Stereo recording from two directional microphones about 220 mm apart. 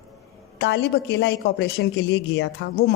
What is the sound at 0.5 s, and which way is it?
A woman's voice, 50° left (ahead or behind).